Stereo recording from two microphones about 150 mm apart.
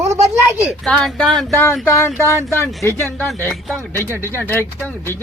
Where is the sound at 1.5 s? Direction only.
15° left (ahead or behind).